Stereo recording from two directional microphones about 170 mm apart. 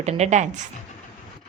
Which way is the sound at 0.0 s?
40° right (ahead or behind).